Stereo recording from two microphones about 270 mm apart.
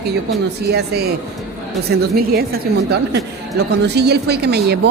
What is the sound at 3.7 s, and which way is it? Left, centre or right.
A woman's voice, right.